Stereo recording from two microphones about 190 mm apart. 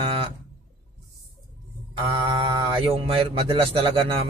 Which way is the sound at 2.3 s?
30° right (ahead or behind).